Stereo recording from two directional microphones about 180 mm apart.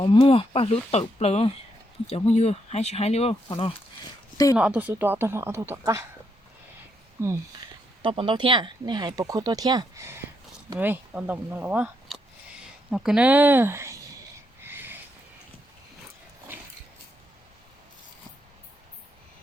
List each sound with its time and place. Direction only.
0.0 s speech: 30° left (ahead or behind)
4.5 s speech: 10° right (ahead or behind)
7.2 s speech: 15° right (ahead or behind)
8.0 s speech: 30° right (ahead or behind)
14.6 s a sound: 10° right (ahead or behind)